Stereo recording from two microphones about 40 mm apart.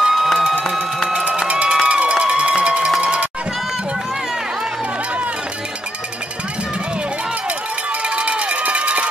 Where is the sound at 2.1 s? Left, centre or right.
Right.